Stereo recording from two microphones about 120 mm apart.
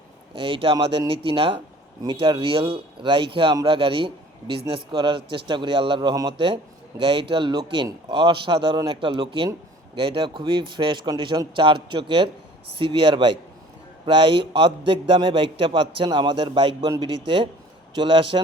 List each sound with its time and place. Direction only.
0.3 s a man's voice: 50° right (ahead or behind)